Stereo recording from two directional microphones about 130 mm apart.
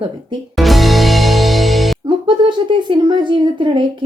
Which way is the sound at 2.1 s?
40° right (ahead or behind).